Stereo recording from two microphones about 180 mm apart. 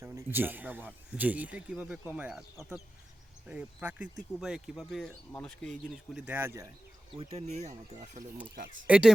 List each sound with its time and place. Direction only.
0.0 s speech: 15° right (ahead or behind)
7.2 s speech: 35° right (ahead or behind)
8.9 s speech: 5° right (ahead or behind)